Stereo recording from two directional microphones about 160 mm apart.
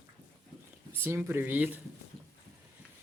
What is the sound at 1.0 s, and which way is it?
Speech, 15° right (ahead or behind).